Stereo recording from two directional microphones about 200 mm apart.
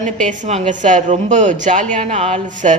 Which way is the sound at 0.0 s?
35° right (ahead or behind).